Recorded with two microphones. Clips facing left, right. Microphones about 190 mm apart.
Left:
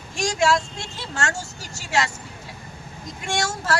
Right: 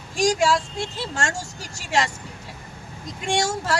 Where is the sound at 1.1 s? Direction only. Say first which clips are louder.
Left 3 dB; 15° right (ahead or behind).